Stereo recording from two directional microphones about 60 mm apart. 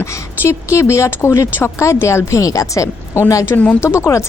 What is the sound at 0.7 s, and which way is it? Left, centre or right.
Speech, left.